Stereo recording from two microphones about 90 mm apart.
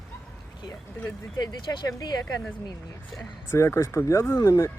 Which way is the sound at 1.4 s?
45° left (ahead or behind).